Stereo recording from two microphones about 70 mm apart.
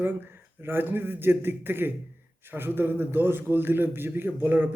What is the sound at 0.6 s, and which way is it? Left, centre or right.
A man's voice, right.